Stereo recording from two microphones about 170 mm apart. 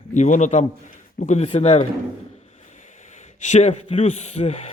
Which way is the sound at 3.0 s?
45° left (ahead or behind).